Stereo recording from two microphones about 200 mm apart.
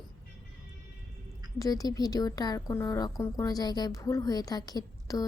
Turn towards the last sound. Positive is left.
turn(degrees=20)  # may be behind; listen again after turning